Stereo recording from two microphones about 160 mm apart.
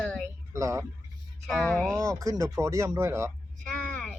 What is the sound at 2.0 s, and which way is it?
Speech, 20° right (ahead or behind).